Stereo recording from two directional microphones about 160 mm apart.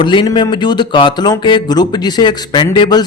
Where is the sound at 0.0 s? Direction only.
30° left (ahead or behind).